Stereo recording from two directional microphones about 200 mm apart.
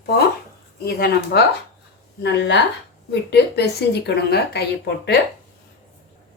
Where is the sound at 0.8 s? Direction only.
50° left (ahead or behind).